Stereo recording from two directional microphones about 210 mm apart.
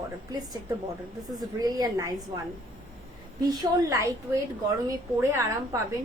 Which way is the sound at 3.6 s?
15° right (ahead or behind).